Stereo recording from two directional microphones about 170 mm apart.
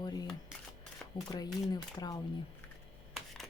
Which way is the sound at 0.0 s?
25° left (ahead or behind).